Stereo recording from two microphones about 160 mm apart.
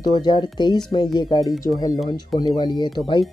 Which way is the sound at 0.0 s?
30° left (ahead or behind).